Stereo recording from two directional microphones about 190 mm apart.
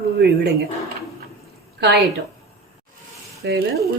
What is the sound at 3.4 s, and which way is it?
Speech, 65° right (ahead or behind).